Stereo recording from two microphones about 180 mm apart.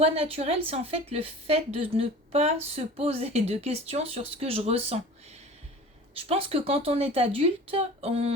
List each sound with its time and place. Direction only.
0.0 s a woman's voice: 35° right (ahead or behind)